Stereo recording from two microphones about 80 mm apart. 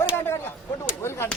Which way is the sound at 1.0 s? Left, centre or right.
Left.